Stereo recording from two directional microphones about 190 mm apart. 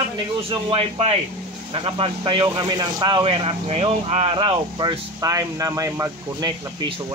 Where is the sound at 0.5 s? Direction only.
30° right (ahead or behind).